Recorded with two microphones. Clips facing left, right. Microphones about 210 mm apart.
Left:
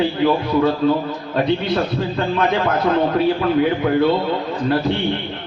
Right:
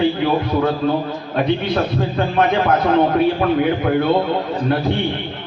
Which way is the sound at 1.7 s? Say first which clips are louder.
Right 1 dB; 55° right (ahead or behind).